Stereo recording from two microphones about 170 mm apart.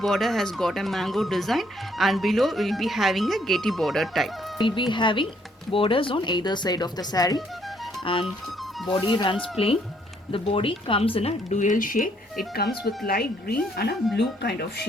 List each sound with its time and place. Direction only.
0.0 s speech: centre (ahead or behind)
4.5 s speech: 25° left (ahead or behind); by 12.0 s 50° left (ahead or behind)
13.1 s speech: 65° left (ahead or behind)
14.2 s speech: 75° left (ahead or behind)